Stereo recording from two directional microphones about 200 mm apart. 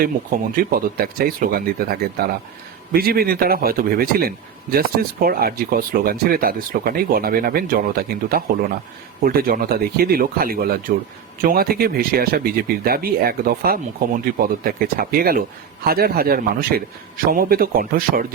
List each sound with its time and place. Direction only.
0.5 s a man's voice: 45° right (ahead or behind)